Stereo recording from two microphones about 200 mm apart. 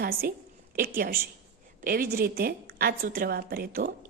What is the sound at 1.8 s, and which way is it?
A woman's voice, 45° right (ahead or behind).